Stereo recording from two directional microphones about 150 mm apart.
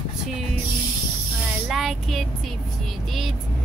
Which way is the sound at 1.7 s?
Centre (ahead or behind).